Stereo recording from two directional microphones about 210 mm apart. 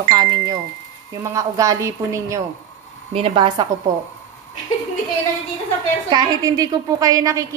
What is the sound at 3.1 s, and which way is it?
Speech, 25° right (ahead or behind).